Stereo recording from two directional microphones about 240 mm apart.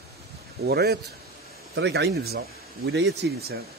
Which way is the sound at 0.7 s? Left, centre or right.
Right.